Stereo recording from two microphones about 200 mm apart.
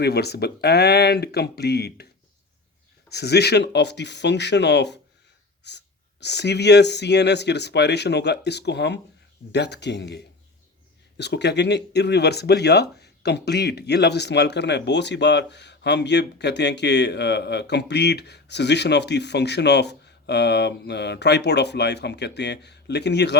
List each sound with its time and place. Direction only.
0.0 s speech: 55° left (ahead or behind)
3.1 s speech: 55° left (ahead or behind)